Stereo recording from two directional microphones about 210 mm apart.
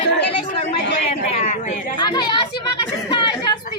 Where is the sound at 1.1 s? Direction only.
35° left (ahead or behind).